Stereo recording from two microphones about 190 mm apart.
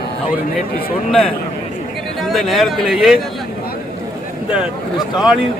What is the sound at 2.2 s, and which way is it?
Speech, centre (ahead or behind).